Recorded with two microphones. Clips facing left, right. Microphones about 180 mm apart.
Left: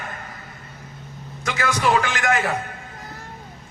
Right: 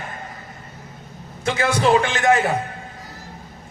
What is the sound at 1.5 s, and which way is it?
Speech, 30° right (ahead or behind).